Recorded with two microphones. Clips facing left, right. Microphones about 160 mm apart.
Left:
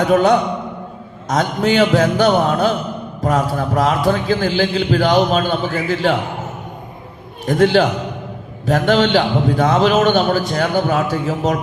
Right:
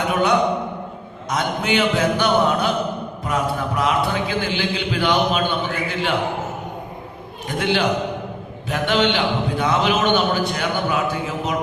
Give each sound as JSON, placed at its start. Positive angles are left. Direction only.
{"t": 0.1, "sound": "a man's voice", "side_deg": 40}
{"t": 7.4, "sound": "a man's voice", "side_deg": 40}